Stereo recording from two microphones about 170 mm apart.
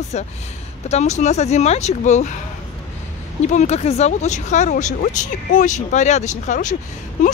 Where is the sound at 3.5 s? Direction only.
40° left (ahead or behind).